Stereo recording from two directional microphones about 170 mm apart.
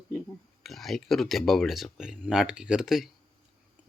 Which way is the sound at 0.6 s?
Centre (ahead or behind).